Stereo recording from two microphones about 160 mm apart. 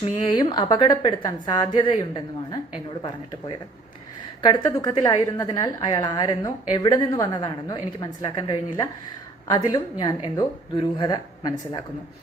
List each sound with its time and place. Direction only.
0.0 s a woman's voice: 30° left (ahead or behind)